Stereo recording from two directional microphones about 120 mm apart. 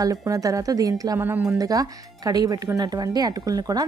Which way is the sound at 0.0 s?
30° right (ahead or behind).